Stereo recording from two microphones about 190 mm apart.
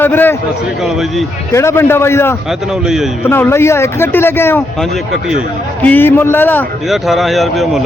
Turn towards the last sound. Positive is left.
turn(degrees=0)  # may be behind; listen again after turning